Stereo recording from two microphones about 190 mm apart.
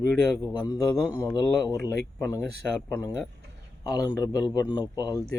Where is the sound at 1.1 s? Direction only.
10° right (ahead or behind).